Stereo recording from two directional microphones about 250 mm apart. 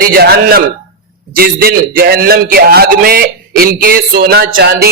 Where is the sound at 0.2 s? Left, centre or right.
Right.